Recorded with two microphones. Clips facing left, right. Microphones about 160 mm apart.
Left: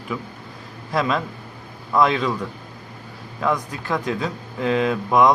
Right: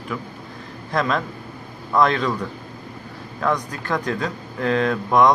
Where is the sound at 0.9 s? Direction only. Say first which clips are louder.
Even; 5° left (ahead or behind).